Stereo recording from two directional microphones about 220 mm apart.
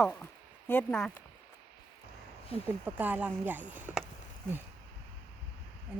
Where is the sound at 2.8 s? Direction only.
5° right (ahead or behind).